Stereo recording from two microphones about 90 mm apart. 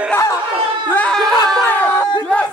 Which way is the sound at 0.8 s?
15° left (ahead or behind).